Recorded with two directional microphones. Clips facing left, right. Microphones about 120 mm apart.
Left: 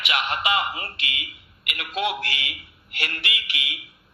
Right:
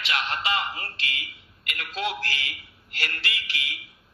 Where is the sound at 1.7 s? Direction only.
25° left (ahead or behind).